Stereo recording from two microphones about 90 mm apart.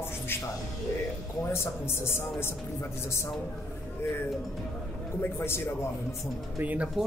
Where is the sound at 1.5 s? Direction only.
30° left (ahead or behind).